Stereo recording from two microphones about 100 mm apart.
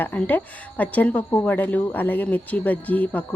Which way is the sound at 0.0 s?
15° left (ahead or behind).